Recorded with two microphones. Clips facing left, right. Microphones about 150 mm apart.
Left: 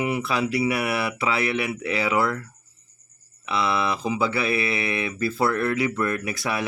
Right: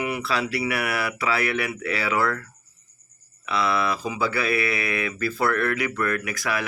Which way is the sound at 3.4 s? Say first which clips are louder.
Even; 25° left (ahead or behind).